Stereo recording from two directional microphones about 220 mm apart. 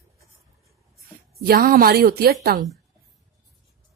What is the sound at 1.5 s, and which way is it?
Speech, 40° right (ahead or behind).